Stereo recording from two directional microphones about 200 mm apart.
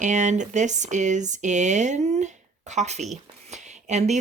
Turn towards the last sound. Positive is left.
turn(degrees=-35)  # may be behind; listen again after turning